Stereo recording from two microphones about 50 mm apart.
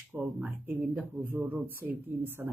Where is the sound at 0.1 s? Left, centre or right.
Right.